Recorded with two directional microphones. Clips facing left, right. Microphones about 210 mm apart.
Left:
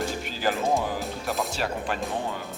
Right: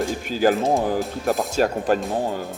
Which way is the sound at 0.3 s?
45° right (ahead or behind).